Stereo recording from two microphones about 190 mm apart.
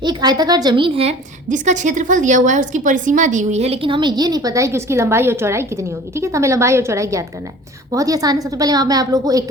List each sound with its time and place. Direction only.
0.0 s a woman's voice: 20° right (ahead or behind)